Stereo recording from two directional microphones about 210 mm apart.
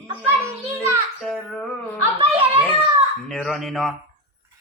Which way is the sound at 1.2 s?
Centre (ahead or behind).